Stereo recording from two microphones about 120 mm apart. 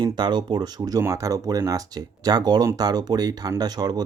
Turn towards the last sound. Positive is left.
turn(degrees=-35)  # may be behind; listen again after turning